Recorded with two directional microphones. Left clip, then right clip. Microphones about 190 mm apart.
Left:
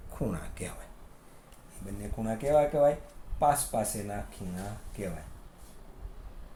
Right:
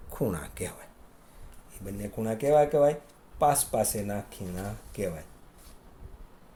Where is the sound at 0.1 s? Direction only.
40° right (ahead or behind).